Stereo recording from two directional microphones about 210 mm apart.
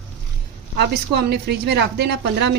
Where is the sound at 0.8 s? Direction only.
50° right (ahead or behind).